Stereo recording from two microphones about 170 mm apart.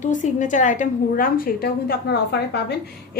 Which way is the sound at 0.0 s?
45° left (ahead or behind).